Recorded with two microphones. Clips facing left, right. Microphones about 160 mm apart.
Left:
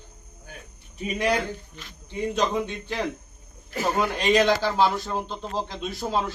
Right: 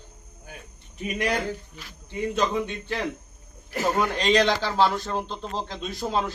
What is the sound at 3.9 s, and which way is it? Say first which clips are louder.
A man's voice: left 1 dB; 10° left (ahead or behind).